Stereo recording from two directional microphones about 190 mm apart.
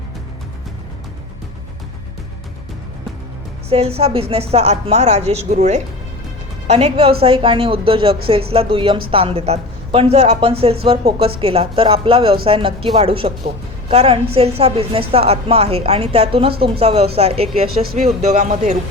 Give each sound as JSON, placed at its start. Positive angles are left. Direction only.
{"t": 3.7, "sound": "a woman's voice", "side_deg": -30}